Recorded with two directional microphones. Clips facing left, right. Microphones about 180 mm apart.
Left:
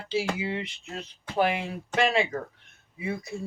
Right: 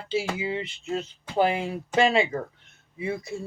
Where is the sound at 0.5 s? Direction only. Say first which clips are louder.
Right 5 dB; 30° right (ahead or behind).